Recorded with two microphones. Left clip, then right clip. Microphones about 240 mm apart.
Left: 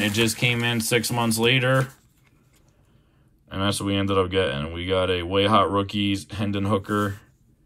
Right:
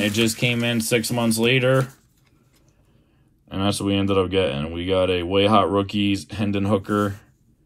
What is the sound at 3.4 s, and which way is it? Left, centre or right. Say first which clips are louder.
Speech: right 2 dB; centre.